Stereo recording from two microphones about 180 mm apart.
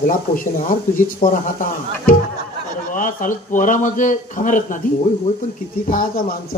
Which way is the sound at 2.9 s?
45° left (ahead or behind).